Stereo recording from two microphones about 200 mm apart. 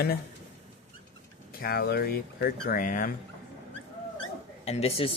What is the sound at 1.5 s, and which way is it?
Speech, 50° left (ahead or behind).